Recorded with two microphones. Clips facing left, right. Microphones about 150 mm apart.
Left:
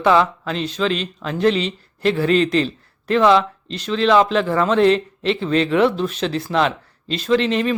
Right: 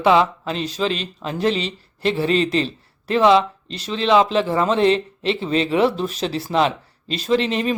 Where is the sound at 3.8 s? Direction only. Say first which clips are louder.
Left 1 dB; 35° right (ahead or behind).